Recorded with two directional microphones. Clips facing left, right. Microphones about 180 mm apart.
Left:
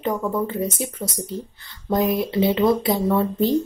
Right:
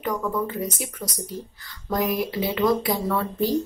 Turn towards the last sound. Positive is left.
turn(degrees=25)  # may be behind; listen again after turning